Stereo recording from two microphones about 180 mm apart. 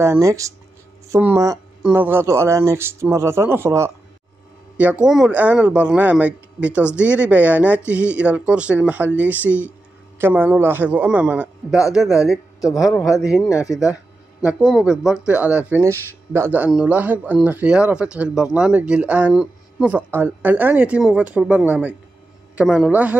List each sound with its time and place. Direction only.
0.0 s speech: 15° right (ahead or behind)
12.9 s speech: 15° left (ahead or behind)
14.4 s speech: 5° right (ahead or behind)